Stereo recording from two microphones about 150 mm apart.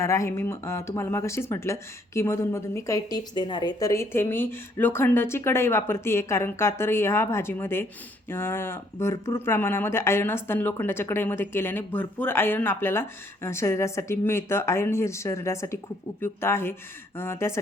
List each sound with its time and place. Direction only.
0.0 s speech: 20° left (ahead or behind)